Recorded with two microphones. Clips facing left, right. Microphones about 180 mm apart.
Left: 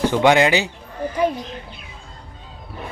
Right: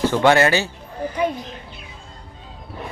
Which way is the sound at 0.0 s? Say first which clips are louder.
Even; 15° left (ahead or behind).